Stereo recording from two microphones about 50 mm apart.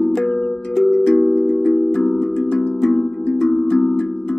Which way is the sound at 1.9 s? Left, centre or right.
Centre.